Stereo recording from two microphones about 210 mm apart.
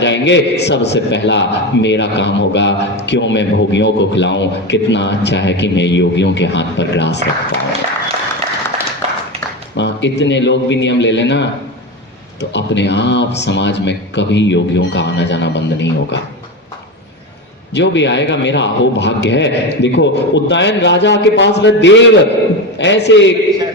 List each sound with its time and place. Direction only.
0.0 s a man's voice: 60° left (ahead or behind)
9.7 s a man's voice: 55° left (ahead or behind)
17.7 s a man's voice: 55° left (ahead or behind)